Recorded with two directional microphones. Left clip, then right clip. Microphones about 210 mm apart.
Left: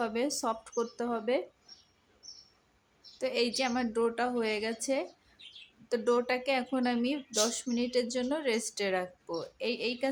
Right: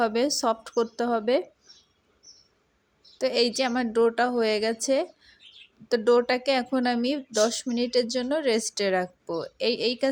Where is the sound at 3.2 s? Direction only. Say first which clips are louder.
Right 6 dB; 25° right (ahead or behind).